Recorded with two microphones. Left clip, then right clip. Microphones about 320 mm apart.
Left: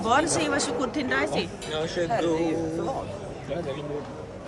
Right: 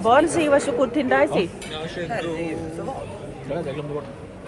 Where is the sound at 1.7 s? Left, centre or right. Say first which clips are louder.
Left 4 dB; left.